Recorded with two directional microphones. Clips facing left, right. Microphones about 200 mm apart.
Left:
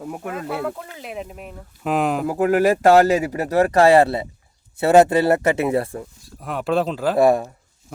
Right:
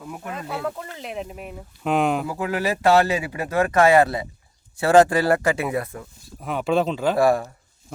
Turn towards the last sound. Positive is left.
turn(degrees=20)  # may be behind; listen again after turning